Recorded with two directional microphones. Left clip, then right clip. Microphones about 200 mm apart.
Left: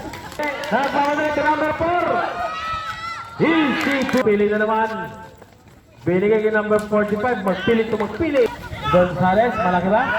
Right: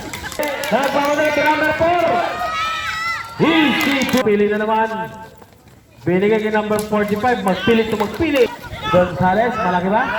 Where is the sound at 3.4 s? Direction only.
55° right (ahead or behind).